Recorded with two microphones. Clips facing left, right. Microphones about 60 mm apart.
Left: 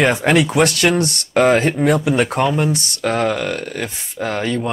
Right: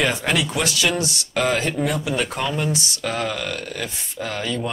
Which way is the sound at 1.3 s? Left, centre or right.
Left.